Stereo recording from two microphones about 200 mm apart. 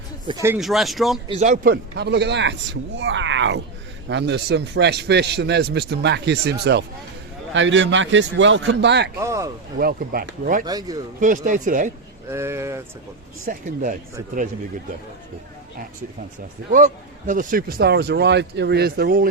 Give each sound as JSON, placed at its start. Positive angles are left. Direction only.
{"t": 0.3, "sound": "speech", "side_deg": -15}
{"t": 0.6, "sound": "speech", "side_deg": 0}
{"t": 1.3, "sound": "speech", "side_deg": -35}
{"t": 1.7, "sound": "a man's voice", "side_deg": -60}
{"t": 7.5, "sound": "a man's voice", "side_deg": -70}
{"t": 9.1, "sound": "speech", "side_deg": -15}
{"t": 9.7, "sound": "speech", "side_deg": -45}
{"t": 10.7, "sound": "a man's voice", "side_deg": -20}
{"t": 11.2, "sound": "speech", "side_deg": -40}
{"t": 12.3, "sound": "speech", "side_deg": -15}
{"t": 13.4, "sound": "speech", "side_deg": -40}
{"t": 16.7, "sound": "speech", "side_deg": -40}